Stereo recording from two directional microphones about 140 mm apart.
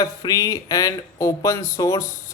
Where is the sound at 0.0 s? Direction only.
25° left (ahead or behind).